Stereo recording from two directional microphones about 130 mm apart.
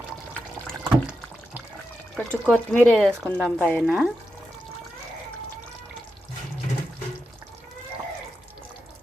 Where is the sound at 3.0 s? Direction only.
5° right (ahead or behind).